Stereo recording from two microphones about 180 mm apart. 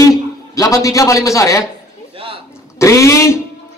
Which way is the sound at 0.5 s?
20° left (ahead or behind).